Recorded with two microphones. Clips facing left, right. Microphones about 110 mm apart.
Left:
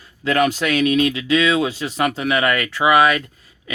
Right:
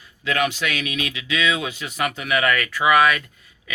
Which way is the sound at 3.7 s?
30° left (ahead or behind).